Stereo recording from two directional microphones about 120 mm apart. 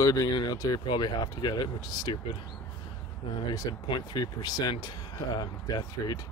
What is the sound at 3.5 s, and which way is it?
Speech, 40° left (ahead or behind).